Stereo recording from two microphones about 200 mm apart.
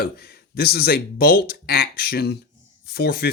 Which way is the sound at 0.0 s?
50° left (ahead or behind).